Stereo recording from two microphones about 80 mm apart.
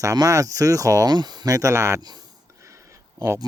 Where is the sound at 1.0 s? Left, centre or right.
Right.